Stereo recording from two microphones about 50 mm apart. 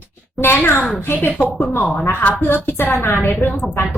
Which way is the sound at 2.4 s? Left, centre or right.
Left.